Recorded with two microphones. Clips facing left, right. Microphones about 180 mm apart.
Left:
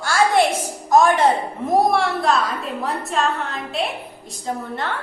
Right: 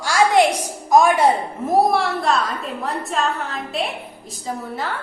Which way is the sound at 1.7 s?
Centre (ahead or behind).